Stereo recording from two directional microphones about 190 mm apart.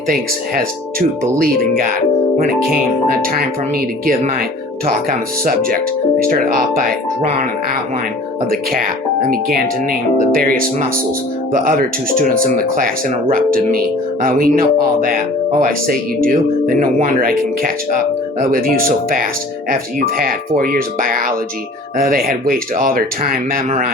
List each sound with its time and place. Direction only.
0.1 s speech: 50° right (ahead or behind)
6.3 s speech: 50° right (ahead or behind)
8.4 s speech: 50° right (ahead or behind)